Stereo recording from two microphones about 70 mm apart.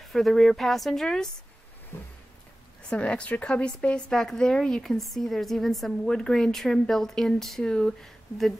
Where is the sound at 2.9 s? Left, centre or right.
Centre.